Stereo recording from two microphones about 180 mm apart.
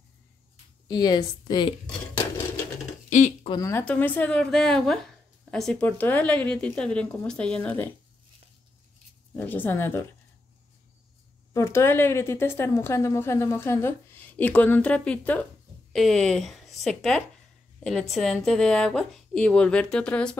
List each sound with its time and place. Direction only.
0.8 s speech: 20° left (ahead or behind)
3.4 s speech: 20° left (ahead or behind)
3.8 s a woman's voice: 10° left (ahead or behind)
9.3 s a woman's voice: 10° left (ahead or behind)
11.5 s a woman's voice: 15° left (ahead or behind)